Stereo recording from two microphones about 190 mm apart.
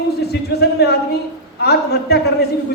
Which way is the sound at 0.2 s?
60° left (ahead or behind).